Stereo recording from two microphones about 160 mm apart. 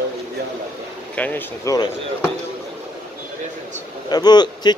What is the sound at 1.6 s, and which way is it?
Speech, 20° left (ahead or behind).